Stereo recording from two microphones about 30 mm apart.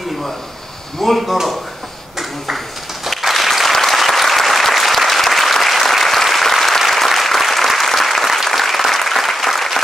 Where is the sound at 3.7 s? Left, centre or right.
Centre.